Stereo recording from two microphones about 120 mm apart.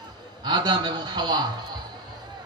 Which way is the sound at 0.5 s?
40° right (ahead or behind).